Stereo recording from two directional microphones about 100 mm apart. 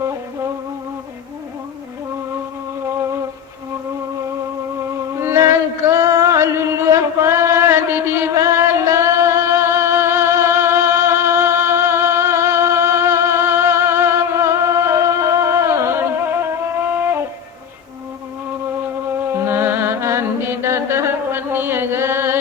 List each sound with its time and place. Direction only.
5.1 s a sound: 30° right (ahead or behind)
6.9 s chant: 30° right (ahead or behind)
8.4 s music: 25° right (ahead or behind)
19.2 s music: 25° right (ahead or behind)